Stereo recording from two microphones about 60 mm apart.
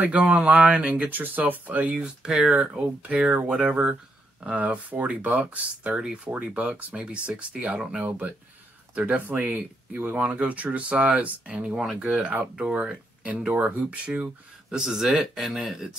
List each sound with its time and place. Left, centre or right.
0.0 s speech: right
2.0 s speech: centre
6.2 s speech: right
8.0 s speech: right
11.7 s speech: centre
13.5 s speech: right
14.7 s speech: centre